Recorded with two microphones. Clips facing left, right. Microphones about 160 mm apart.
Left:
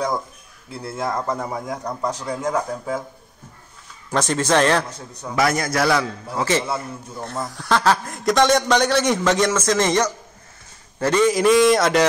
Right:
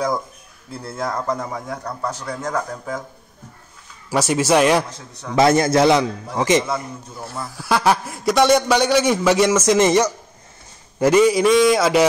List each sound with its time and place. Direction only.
0.8 s a man's voice: 5° left (ahead or behind)
4.1 s a man's voice: 10° right (ahead or behind)
5.3 s a man's voice: 25° right (ahead or behind)
11.3 s a sound: centre (ahead or behind)